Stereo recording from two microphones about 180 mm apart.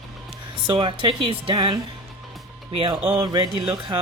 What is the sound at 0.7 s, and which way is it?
Speech, 25° right (ahead or behind).